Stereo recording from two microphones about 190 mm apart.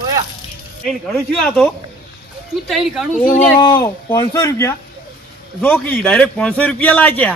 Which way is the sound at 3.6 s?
20° left (ahead or behind).